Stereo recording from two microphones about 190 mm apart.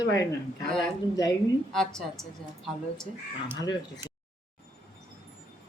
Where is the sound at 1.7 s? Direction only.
Centre (ahead or behind).